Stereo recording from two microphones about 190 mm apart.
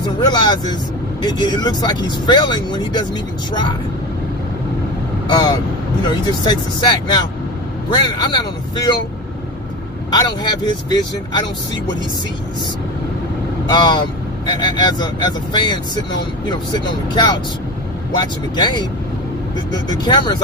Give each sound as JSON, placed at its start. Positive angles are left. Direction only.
{"t": 0.0, "sound": "speech", "side_deg": 20}
{"t": 5.3, "sound": "speech", "side_deg": 20}
{"t": 10.1, "sound": "speech", "side_deg": 20}
{"t": 13.7, "sound": "speech", "side_deg": 20}
{"t": 18.2, "sound": "speech", "side_deg": 20}
{"t": 19.9, "sound": "speech", "side_deg": 25}